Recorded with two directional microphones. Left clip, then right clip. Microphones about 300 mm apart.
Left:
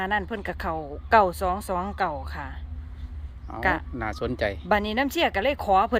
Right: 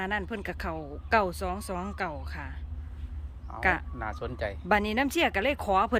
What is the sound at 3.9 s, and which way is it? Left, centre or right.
Speech, left.